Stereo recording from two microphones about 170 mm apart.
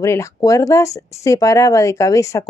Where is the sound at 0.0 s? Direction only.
15° left (ahead or behind).